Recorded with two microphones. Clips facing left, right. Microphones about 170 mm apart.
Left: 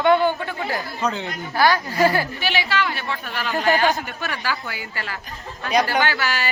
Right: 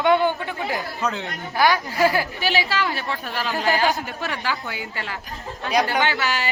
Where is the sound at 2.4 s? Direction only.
40° right (ahead or behind).